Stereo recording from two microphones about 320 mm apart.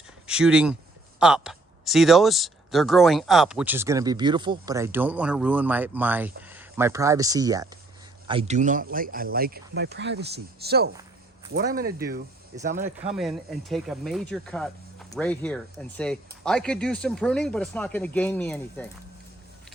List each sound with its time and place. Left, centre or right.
0.3 s speech: centre; by 12.2 s right
12.7 s speech: centre